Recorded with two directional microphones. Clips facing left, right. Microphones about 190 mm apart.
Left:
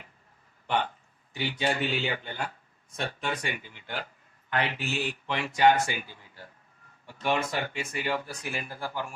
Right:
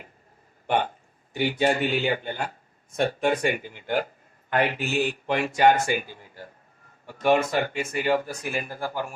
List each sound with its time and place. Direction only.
0.7 s speech: 50° right (ahead or behind)